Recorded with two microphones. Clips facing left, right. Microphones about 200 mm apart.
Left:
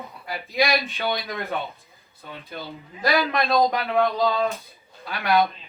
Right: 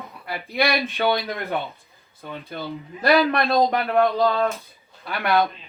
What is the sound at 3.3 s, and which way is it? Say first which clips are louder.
Speech: right 1 dB; 50° right (ahead or behind).